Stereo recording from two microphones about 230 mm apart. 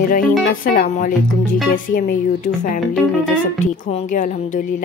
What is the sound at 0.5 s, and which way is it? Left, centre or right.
A woman's voice, left.